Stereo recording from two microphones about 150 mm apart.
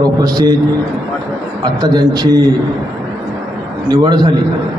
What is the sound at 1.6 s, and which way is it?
Speech, 30° right (ahead or behind).